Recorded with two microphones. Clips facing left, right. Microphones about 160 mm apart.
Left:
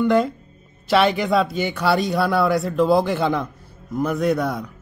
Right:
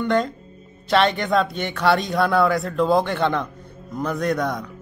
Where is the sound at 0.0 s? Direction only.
5° left (ahead or behind).